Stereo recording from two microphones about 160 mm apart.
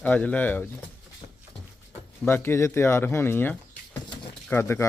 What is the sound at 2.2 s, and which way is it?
Speech, 15° left (ahead or behind).